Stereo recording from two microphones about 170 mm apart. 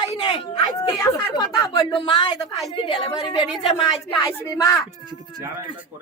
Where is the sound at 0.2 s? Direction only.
25° left (ahead or behind).